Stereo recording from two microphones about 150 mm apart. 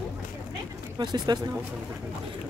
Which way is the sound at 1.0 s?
25° right (ahead or behind).